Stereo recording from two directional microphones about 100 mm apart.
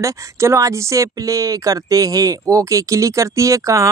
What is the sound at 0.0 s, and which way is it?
Speech, 30° right (ahead or behind).